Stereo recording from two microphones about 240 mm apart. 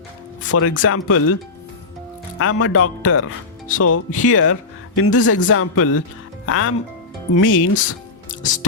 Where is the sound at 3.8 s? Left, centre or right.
Left.